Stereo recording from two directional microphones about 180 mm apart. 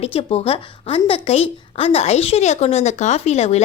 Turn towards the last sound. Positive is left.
turn(degrees=35)  # may be behind; listen again after turning